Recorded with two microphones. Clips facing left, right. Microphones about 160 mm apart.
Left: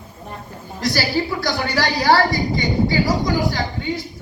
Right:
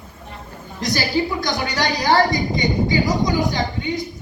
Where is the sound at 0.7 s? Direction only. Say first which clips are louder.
Even; 20° right (ahead or behind).